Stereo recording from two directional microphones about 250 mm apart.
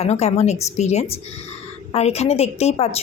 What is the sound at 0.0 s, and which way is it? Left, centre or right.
A woman's voice, left.